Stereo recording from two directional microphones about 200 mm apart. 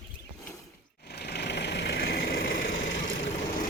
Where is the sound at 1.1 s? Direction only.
55° left (ahead or behind).